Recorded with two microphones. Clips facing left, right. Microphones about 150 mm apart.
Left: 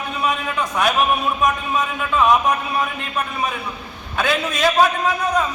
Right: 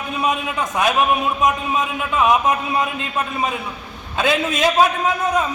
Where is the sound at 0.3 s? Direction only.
20° right (ahead or behind).